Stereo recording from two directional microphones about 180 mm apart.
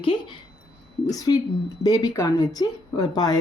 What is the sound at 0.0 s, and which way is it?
Speech, 30° left (ahead or behind).